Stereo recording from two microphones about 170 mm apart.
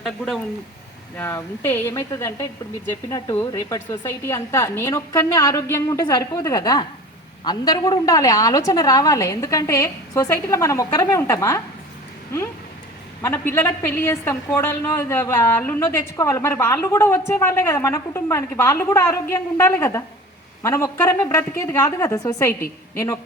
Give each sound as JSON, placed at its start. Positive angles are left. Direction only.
{"t": 1.1, "sound": "a woman's voice", "side_deg": 10}
{"t": 13.8, "sound": "a woman's voice", "side_deg": 15}